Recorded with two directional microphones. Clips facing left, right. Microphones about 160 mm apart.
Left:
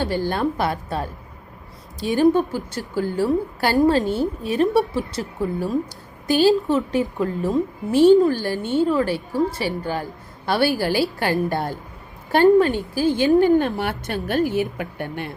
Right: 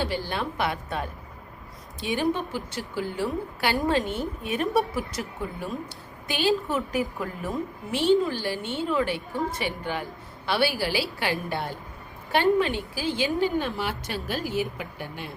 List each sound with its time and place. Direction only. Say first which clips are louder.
0.0 s a woman's voice: left 7 dB; 45° left (ahead or behind); by 7.9 s 25° left (ahead or behind)
7.9 s a woman's voice: left 9 dB; 45° left (ahead or behind)